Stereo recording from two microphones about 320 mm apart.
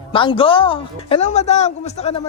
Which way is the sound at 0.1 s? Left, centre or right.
Centre.